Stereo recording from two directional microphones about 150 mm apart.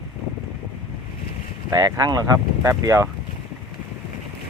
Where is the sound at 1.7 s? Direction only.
25° right (ahead or behind).